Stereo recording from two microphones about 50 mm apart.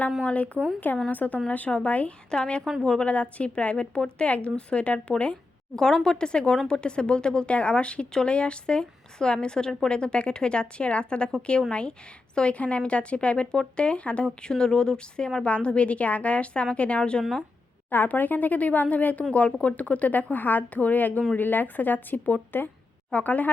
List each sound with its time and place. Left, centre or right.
0.2 s speech: left
3.1 s speech: left
5.7 s speech: centre
17.9 s speech: left